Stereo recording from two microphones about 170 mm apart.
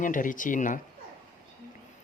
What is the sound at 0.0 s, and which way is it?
Speech, 50° left (ahead or behind).